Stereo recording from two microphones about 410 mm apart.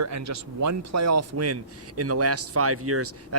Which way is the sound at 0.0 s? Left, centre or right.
Right.